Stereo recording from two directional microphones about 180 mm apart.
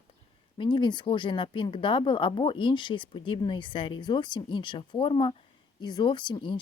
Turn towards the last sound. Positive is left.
turn(degrees=25)  # may be behind; listen again after turning